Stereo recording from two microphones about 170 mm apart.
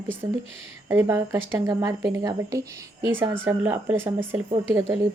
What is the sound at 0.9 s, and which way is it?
Speech, 15° right (ahead or behind).